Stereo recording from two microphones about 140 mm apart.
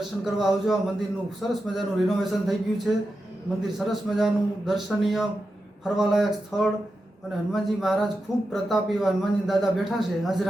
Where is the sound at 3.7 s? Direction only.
Centre (ahead or behind).